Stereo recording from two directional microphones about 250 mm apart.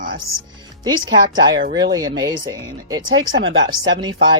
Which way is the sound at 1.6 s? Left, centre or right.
Right.